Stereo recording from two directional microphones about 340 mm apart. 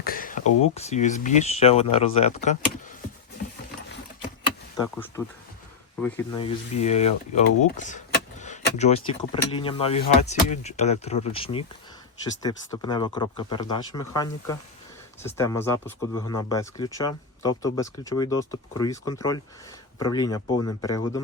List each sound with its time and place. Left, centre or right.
0.0 s speech: left
4.8 s speech: centre